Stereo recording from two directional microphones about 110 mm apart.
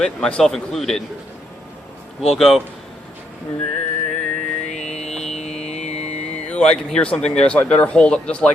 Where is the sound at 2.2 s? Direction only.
Centre (ahead or behind).